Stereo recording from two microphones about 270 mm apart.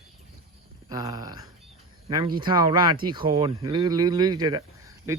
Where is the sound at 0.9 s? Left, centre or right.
Centre.